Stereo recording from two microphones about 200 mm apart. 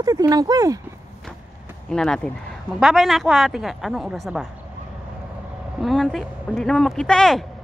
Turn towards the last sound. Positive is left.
turn(degrees=5)  # may be behind; listen again after turning